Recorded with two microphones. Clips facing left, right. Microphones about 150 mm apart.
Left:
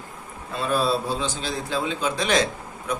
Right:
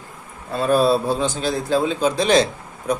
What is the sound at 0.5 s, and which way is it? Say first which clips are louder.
A man's voice: right 6 dB; 50° right (ahead or behind).